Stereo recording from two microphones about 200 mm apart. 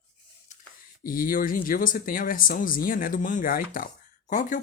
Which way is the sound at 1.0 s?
45° left (ahead or behind).